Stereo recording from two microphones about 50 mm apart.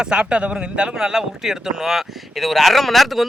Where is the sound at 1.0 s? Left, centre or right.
Centre.